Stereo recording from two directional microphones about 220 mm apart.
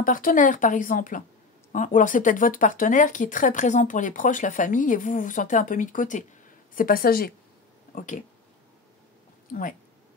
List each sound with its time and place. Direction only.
0.0 s a woman's voice: 40° left (ahead or behind)
9.5 s speech: 35° left (ahead or behind)